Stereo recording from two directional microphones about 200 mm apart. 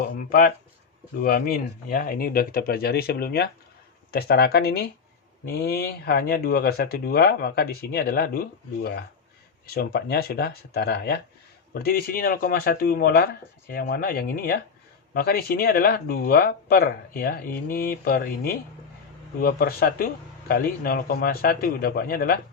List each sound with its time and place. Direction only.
0.0 s speech: 45° left (ahead or behind)